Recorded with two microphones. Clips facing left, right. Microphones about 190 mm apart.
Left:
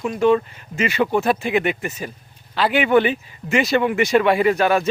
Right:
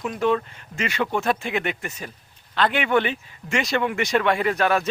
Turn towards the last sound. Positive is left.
turn(degrees=5)  # may be behind; listen again after turning